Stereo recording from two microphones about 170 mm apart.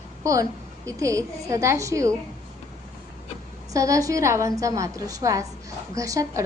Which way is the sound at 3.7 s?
20° right (ahead or behind).